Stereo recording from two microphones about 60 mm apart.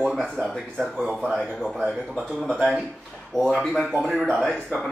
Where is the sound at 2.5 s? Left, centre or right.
Right.